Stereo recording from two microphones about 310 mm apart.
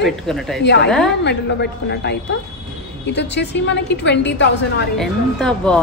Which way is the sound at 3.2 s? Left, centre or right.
Left.